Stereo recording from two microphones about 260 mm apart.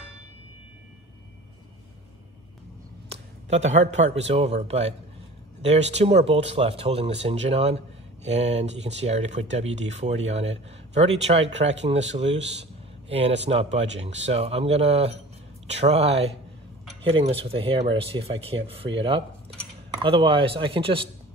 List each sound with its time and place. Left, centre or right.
3.1 s a sound: right
3.9 s speech: right
13.5 s speech: right